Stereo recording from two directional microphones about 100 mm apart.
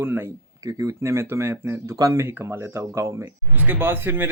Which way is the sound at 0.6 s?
35° right (ahead or behind).